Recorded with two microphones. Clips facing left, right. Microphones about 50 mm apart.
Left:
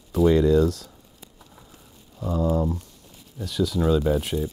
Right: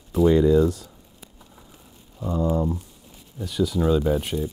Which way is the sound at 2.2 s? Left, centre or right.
Centre.